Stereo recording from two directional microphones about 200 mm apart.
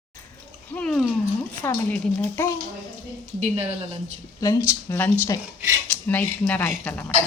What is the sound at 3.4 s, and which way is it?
Speech, 30° right (ahead or behind).